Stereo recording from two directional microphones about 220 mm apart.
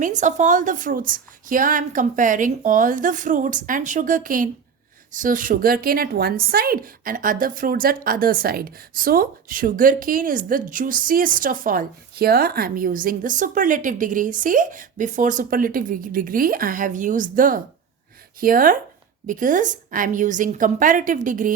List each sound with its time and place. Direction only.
0.0 s a woman's voice: 35° right (ahead or behind)